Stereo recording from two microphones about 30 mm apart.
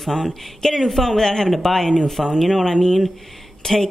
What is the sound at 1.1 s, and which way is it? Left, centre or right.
Speech, centre.